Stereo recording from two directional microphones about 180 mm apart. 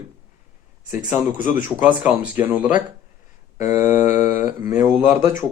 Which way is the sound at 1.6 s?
10° right (ahead or behind).